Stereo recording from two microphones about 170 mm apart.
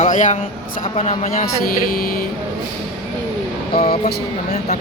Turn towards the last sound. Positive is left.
turn(degrees=35)  # may be behind; listen again after turning